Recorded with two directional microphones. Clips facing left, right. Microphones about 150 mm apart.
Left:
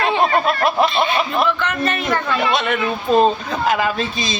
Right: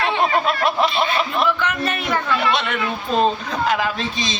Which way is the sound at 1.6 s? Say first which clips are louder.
Left 2 dB; 10° right (ahead or behind).